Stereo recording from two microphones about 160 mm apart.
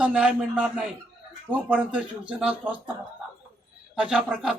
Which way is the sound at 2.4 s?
5° right (ahead or behind).